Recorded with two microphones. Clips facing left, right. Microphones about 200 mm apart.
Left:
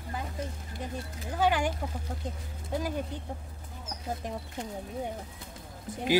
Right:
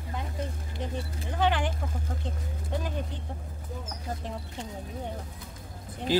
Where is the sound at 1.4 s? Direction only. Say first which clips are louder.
Left 1 dB; 10° left (ahead or behind).